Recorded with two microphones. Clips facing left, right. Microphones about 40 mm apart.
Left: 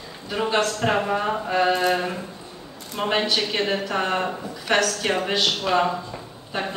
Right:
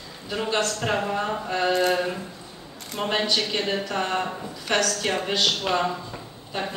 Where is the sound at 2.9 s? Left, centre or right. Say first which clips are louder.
Left 2 dB; centre.